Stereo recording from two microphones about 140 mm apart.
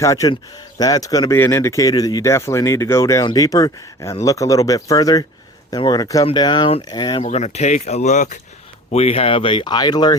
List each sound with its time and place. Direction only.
0.0 s speech: 25° left (ahead or behind)
7.3 s speech: 55° left (ahead or behind)
8.9 s speech: 45° left (ahead or behind); by 10.2 s 30° left (ahead or behind)